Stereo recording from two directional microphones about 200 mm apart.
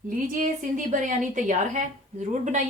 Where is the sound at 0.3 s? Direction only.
45° right (ahead or behind).